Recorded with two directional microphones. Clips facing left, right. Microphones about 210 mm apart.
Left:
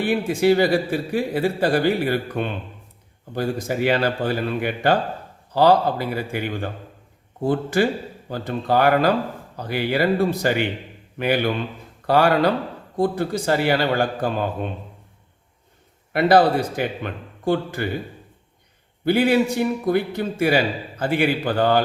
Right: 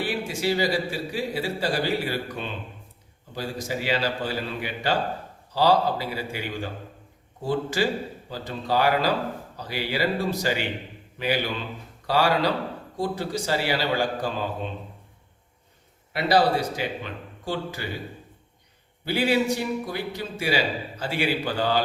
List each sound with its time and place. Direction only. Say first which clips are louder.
0.1 s a man's voice: left 8 dB; 55° left (ahead or behind)
16.1 s speech: left 5 dB; 55° left (ahead or behind)
19.0 s a man's voice: left 5 dB; 55° left (ahead or behind)